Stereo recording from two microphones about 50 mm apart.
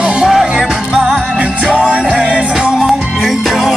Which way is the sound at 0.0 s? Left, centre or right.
Centre.